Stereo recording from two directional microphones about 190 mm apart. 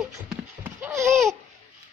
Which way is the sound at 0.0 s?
5° right (ahead or behind).